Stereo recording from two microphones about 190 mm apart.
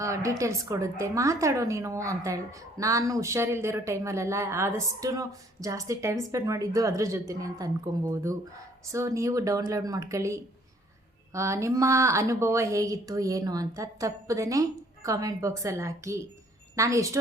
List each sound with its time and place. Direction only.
0.0 s a woman's voice: 15° right (ahead or behind)